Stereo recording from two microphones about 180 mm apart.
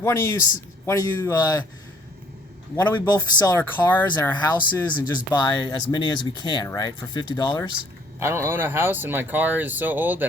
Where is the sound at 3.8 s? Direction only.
5° left (ahead or behind).